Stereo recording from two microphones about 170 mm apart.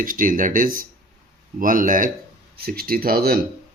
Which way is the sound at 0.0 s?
55° right (ahead or behind).